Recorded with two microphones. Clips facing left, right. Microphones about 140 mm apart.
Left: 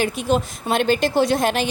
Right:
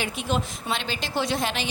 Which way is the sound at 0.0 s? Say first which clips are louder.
Left 7 dB; 40° left (ahead or behind).